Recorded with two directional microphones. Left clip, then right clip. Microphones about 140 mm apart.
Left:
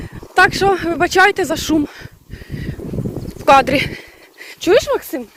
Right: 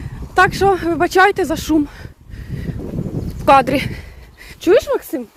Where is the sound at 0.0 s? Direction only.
35° right (ahead or behind).